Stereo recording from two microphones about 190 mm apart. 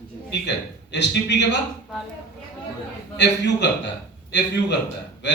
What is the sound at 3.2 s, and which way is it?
Speech, 65° left (ahead or behind).